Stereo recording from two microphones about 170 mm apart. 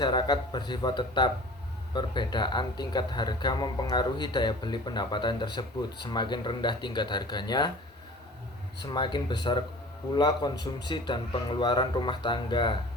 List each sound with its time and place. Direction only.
0.0 s speech: 25° left (ahead or behind)
8.9 s speech: 25° left (ahead or behind)